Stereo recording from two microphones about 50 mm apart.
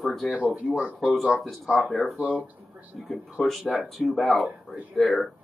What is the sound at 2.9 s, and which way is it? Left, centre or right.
A man's voice, centre.